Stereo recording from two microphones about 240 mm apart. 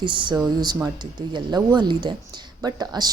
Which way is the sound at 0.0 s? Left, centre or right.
Centre.